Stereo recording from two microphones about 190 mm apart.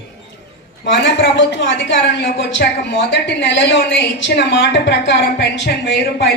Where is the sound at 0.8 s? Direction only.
70° left (ahead or behind).